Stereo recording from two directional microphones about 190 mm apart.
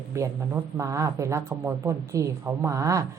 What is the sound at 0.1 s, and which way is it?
Speech, 15° right (ahead or behind).